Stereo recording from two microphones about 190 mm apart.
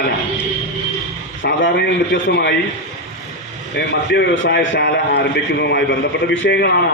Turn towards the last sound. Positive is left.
turn(degrees=65)  # may be behind; listen again after turning